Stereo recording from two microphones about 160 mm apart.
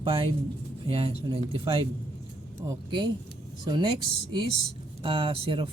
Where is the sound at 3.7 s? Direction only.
30° right (ahead or behind).